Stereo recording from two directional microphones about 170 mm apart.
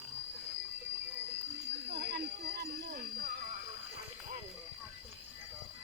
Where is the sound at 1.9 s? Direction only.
75° right (ahead or behind); by 3.4 s 60° right (ahead or behind).